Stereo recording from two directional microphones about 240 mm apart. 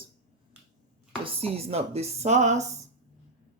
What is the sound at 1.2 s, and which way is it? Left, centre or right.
Speech, right.